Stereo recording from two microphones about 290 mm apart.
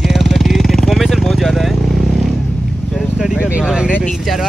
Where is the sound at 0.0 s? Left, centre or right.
Centre.